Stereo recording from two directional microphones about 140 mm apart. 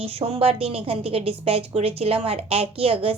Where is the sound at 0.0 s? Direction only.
45° right (ahead or behind).